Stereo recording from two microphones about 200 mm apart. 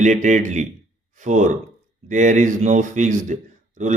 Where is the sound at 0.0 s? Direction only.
35° right (ahead or behind).